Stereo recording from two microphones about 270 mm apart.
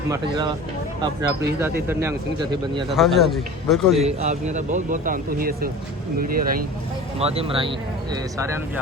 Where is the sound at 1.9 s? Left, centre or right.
Centre.